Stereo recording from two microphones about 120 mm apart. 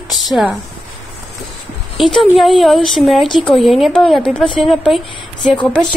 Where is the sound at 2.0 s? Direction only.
Centre (ahead or behind).